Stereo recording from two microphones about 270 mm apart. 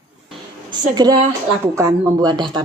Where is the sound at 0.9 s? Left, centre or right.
Centre.